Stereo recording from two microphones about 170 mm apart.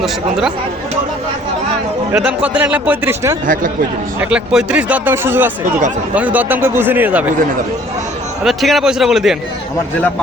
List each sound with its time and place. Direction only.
0.0 s a man's voice: 5° right (ahead or behind)
2.1 s speech: 10° right (ahead or behind)
3.4 s a man's voice: 50° right (ahead or behind)
4.2 s speech: 5° right (ahead or behind)
8.4 s a man's voice: centre (ahead or behind)